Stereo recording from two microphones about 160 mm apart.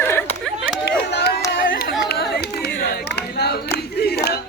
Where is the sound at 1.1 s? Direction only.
85° left.